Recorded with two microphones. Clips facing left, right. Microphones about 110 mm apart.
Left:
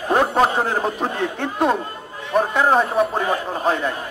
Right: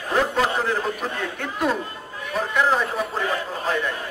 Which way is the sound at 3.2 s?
30° left (ahead or behind).